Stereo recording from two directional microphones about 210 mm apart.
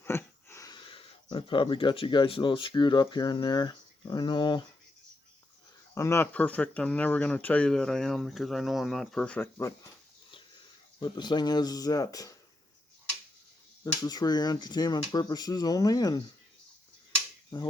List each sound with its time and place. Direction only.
0.0 s speech: 10° left (ahead or behind)
5.9 s speech: 15° left (ahead or behind)
11.0 s speech: 20° left (ahead or behind)
13.8 s speech: 20° left (ahead or behind)